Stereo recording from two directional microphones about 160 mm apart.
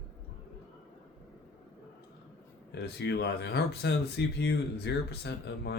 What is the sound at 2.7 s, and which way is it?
Speech, 90° left.